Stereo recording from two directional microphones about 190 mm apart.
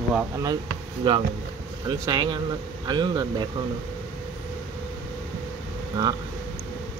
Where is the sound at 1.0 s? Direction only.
25° right (ahead or behind).